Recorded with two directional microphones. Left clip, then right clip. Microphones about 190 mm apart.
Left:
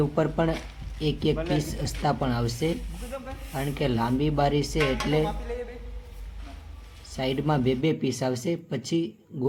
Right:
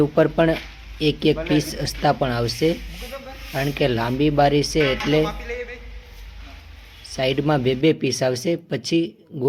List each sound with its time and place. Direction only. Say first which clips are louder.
0.0 s speech: right 8 dB; 40° right (ahead or behind)
7.2 s speech: right 6 dB; 40° right (ahead or behind)